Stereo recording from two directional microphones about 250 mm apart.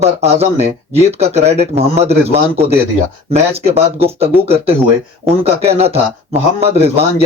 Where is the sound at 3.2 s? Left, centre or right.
Right.